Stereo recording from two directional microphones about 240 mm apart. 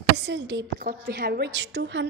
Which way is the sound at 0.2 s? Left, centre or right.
Right.